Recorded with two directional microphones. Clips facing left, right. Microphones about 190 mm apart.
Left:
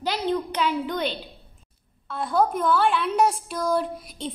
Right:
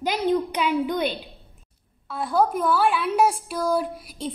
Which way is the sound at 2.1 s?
Centre (ahead or behind).